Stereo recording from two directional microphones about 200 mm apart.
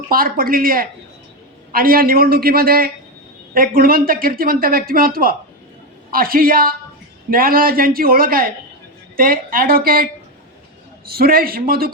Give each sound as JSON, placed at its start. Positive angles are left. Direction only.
{"t": 0.1, "sound": "speech", "side_deg": -45}
{"t": 11.1, "sound": "speech", "side_deg": -50}